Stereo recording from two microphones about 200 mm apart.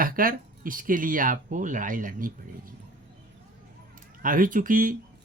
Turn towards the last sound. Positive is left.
turn(degrees=-45)  # may be behind; listen again after turning